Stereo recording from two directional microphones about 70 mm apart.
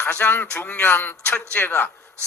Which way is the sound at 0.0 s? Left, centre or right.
Left.